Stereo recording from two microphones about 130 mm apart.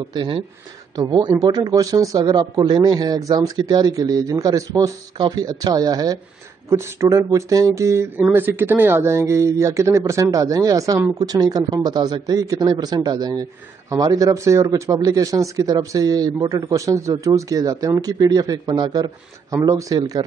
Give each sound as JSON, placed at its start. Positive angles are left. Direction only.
{"t": 0.1, "sound": "a man's voice", "side_deg": -35}